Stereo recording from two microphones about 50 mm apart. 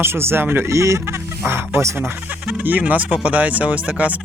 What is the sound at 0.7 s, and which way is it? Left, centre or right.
Speech, right.